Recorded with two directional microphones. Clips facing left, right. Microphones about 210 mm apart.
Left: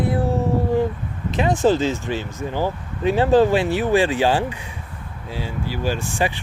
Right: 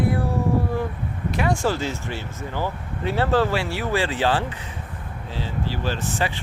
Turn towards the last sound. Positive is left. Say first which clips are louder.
# left 3 dB
turn(degrees=10)  # may be behind; listen again after turning